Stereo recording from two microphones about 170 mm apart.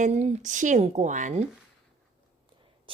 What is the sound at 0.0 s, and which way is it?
A woman's voice, 40° right (ahead or behind).